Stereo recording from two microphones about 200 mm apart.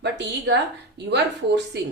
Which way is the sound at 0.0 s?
60° right (ahead or behind).